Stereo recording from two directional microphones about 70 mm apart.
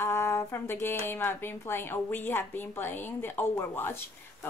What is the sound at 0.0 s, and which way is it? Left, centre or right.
Speech, left.